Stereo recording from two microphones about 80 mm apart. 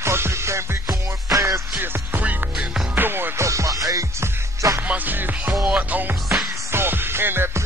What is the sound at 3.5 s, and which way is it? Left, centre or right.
Music, right.